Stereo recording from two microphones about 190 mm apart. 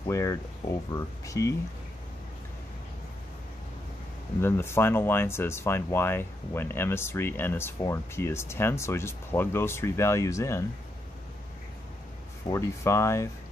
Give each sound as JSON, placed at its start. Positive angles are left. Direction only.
{"t": 0.0, "sound": "speech", "side_deg": 20}
{"t": 4.4, "sound": "speech", "side_deg": 15}
{"t": 12.4, "sound": "speech", "side_deg": 15}